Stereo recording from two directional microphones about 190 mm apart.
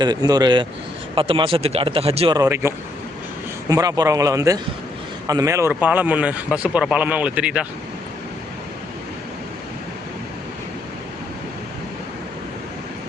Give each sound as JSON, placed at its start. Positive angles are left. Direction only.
{"t": 0.0, "sound": "speech", "side_deg": -20}
{"t": 2.4, "sound": "a man's voice", "side_deg": -15}